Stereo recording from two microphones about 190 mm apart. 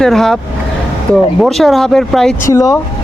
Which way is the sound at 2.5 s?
20° left (ahead or behind).